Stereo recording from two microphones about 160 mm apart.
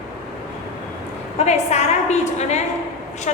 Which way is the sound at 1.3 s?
45° left (ahead or behind).